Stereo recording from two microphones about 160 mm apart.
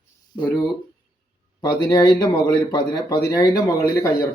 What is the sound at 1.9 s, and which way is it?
Speech, 25° left (ahead or behind).